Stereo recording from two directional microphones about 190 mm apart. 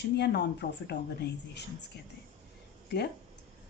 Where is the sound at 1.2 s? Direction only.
65° left (ahead or behind).